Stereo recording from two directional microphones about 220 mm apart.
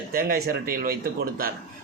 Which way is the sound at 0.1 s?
40° right (ahead or behind).